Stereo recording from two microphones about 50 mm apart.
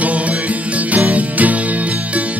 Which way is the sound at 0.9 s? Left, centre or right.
Right.